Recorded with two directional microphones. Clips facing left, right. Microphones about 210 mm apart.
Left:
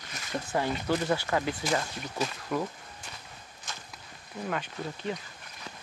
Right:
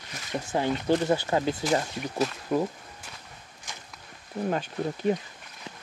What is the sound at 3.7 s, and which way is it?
Walk, 15° right (ahead or behind).